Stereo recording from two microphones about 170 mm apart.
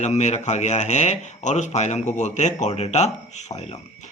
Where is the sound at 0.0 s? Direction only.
40° left (ahead or behind).